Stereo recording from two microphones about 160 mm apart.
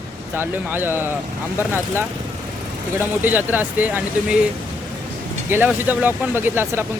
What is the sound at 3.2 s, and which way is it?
Speech, 10° right (ahead or behind).